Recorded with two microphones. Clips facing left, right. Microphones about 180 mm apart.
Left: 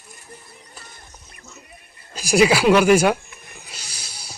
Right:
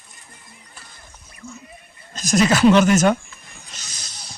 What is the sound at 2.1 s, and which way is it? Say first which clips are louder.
Speech: left 2 dB; 10° left (ahead or behind).